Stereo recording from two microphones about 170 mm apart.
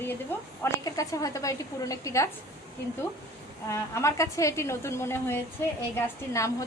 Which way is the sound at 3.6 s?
15° left (ahead or behind).